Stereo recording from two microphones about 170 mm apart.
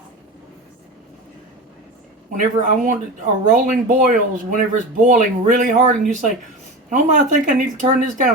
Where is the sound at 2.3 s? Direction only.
50° right (ahead or behind).